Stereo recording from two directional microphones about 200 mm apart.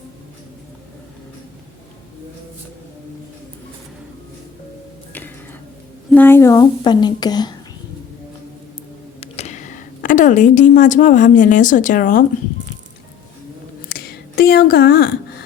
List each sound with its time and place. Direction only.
6.1 s a woman's voice: 10° left (ahead or behind)
9.2 s a woman's voice: 30° left (ahead or behind)
13.8 s a sound: 50° left (ahead or behind)